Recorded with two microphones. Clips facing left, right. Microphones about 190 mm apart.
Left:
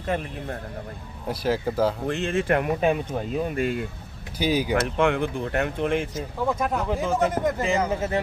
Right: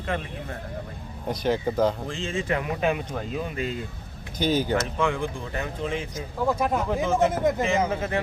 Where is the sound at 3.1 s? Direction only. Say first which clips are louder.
Left 3 dB; 25° left (ahead or behind).